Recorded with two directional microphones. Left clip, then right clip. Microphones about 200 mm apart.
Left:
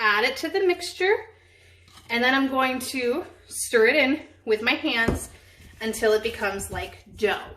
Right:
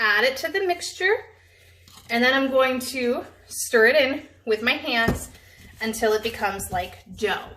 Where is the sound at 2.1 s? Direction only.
15° left (ahead or behind).